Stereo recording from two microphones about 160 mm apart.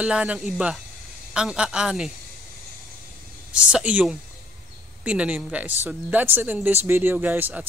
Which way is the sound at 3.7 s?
5° right (ahead or behind).